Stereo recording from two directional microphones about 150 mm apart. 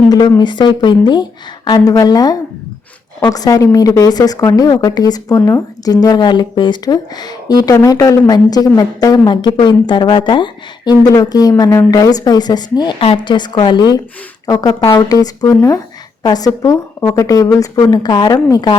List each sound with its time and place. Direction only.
0.1 s speech: 25° left (ahead or behind)